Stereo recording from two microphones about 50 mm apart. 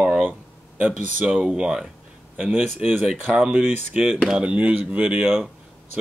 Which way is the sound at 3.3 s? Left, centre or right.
Right.